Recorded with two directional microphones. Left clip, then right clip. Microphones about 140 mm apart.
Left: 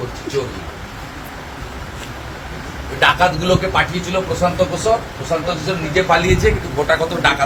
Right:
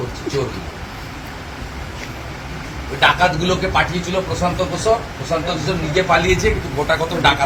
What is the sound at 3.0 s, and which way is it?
A man's voice, 5° left (ahead or behind).